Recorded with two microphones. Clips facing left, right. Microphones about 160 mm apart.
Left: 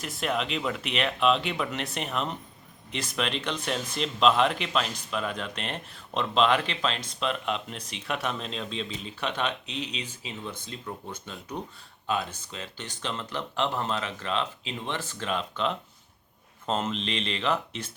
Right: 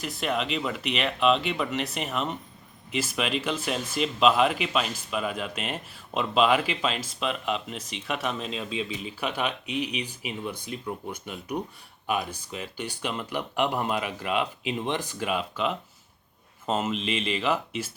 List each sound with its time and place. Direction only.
0.0 s speech: centre (ahead or behind)